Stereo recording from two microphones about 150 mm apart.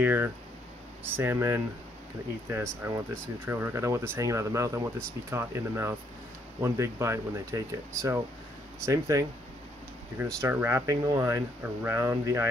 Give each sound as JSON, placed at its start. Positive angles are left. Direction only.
{"t": 0.0, "sound": "speech", "side_deg": -10}
{"t": 2.8, "sound": "speech", "side_deg": -20}